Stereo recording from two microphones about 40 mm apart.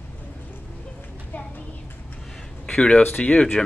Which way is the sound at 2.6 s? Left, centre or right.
Left.